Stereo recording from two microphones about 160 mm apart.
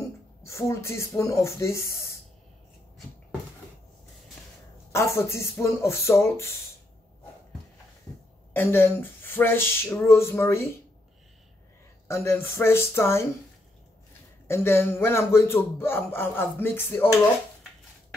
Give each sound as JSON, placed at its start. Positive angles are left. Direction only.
{"t": 0.4, "sound": "speech", "side_deg": 15}
{"t": 4.9, "sound": "speech", "side_deg": 15}
{"t": 8.5, "sound": "speech", "side_deg": 15}
{"t": 12.1, "sound": "speech", "side_deg": 15}
{"t": 14.5, "sound": "speech", "side_deg": 15}